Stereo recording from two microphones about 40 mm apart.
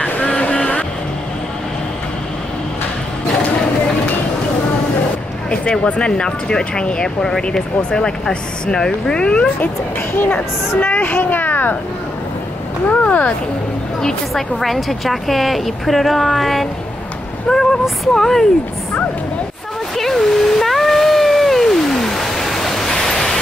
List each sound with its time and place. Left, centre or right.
0.0 s vehicle: left
5.5 s speech: left
10.1 s speech: left
12.8 s speech: left
14.3 s a woman's voice: centre
17.5 s speech: centre
20.0 s a sound: centre